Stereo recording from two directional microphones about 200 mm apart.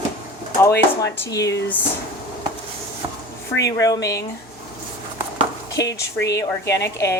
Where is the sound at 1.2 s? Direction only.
15° left (ahead or behind).